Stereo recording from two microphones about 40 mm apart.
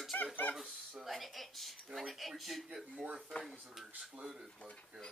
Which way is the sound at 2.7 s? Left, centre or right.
Centre.